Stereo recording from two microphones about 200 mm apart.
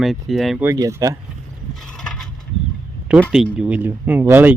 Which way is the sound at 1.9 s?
Centre (ahead or behind).